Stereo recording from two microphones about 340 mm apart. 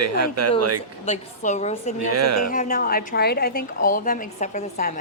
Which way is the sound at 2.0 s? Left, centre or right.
Right.